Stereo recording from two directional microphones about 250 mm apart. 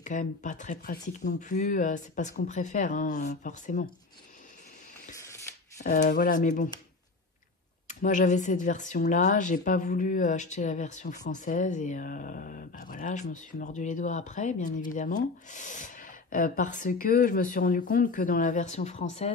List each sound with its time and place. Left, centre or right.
0.0 s speech: left
5.8 s speech: left
7.9 s speech: left